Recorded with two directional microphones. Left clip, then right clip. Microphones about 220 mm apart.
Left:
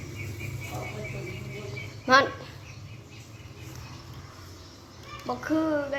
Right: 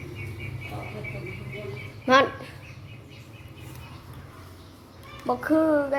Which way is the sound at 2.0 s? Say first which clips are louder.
Right 1 dB; 15° right (ahead or behind).